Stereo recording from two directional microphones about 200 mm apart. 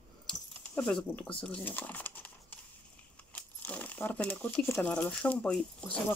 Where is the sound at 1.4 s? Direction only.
5° left (ahead or behind).